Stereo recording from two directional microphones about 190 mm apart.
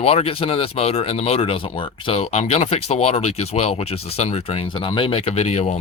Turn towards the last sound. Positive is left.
turn(degrees=35)  # may be behind; listen again after turning